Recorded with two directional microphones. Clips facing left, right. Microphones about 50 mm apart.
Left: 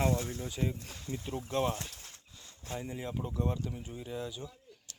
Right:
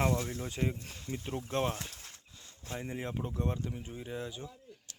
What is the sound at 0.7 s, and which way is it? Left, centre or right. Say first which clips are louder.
Speech: even; right.